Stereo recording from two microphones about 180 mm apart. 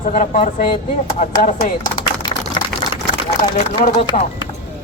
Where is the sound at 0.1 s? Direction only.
45° left (ahead or behind).